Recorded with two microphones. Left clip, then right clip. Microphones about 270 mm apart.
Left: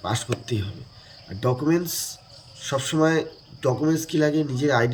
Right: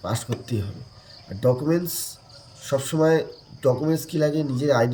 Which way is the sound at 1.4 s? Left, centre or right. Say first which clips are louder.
Right 1 dB; centre.